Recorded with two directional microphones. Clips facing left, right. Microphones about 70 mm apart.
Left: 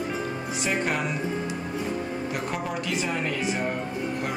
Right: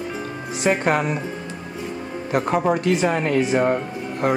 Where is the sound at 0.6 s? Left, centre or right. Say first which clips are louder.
Right 8 dB; right.